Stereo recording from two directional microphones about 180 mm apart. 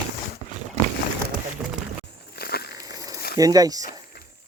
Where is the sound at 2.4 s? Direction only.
60° left (ahead or behind).